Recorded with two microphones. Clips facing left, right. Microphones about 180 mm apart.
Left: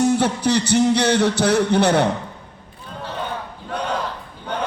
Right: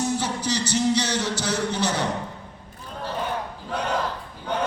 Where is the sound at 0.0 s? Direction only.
60° left (ahead or behind).